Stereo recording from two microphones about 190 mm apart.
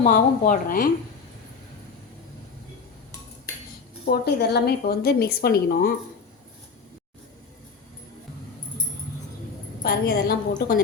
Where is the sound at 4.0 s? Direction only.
60° left (ahead or behind).